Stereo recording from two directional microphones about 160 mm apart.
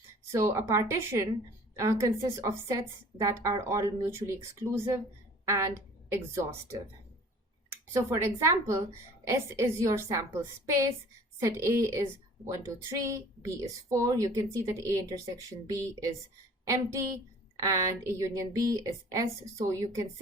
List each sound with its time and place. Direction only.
0.3 s a woman's voice: 15° right (ahead or behind)
6.1 s a woman's voice: 15° right (ahead or behind)